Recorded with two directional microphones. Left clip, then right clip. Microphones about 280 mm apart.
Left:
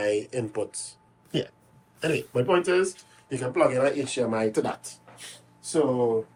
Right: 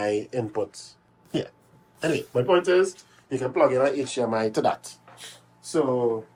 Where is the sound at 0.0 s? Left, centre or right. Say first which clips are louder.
Even; right.